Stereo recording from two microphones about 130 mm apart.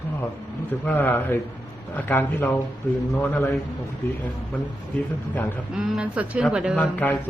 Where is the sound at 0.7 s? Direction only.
15° left (ahead or behind).